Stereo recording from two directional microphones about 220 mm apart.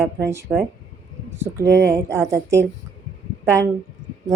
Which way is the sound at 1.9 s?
15° right (ahead or behind).